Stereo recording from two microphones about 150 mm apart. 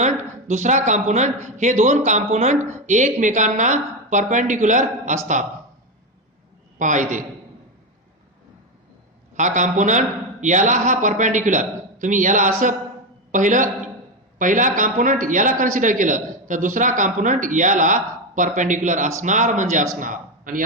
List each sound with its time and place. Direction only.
0.0 s a man's voice: 50° right (ahead or behind)
6.7 s a man's voice: 55° right (ahead or behind)
9.3 s a man's voice: 55° right (ahead or behind)